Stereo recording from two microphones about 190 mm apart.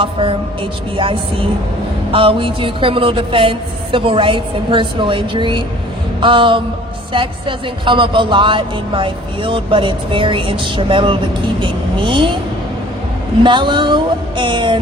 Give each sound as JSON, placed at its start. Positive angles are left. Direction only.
{"t": 0.0, "sound": "speech", "side_deg": -30}
{"t": 13.4, "sound": "speech", "side_deg": -25}